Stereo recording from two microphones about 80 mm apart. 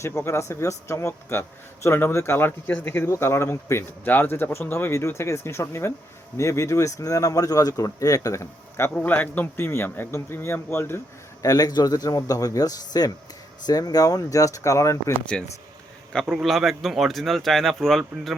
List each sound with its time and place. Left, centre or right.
0.0 s speech: left
9.0 s speech: left
11.4 s speech: left
16.3 s speech: centre